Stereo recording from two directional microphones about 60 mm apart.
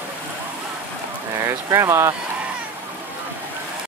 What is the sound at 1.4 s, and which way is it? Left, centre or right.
Speech, right.